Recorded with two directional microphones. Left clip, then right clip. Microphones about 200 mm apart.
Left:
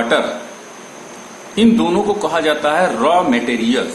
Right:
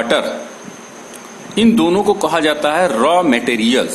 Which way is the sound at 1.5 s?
55° right (ahead or behind).